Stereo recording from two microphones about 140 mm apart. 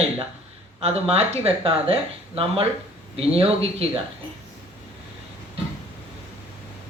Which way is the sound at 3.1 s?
45° right (ahead or behind).